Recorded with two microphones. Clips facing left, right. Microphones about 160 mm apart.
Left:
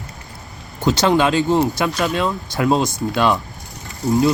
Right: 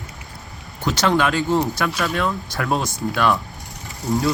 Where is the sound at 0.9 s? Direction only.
25° left (ahead or behind).